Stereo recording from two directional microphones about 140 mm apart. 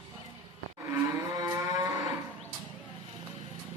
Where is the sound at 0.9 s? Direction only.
25° right (ahead or behind).